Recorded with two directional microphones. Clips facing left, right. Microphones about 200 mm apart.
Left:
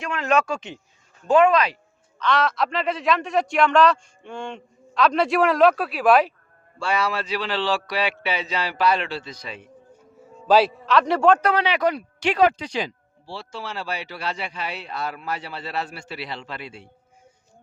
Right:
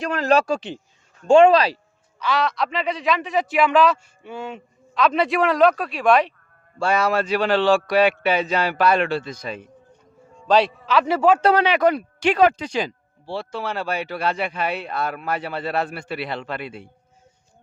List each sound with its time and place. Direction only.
0.0 s a man's voice: 35° right (ahead or behind)
2.1 s a man's voice: 5° right (ahead or behind)
6.7 s a man's voice: 45° right (ahead or behind)
9.9 s a sound: 5° left (ahead or behind)
11.5 s speech: 50° right (ahead or behind)